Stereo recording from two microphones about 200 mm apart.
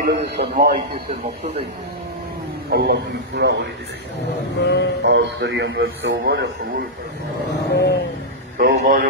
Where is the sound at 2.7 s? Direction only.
55° right (ahead or behind).